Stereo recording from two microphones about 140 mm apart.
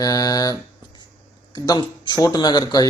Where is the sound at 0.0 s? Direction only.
25° left (ahead or behind).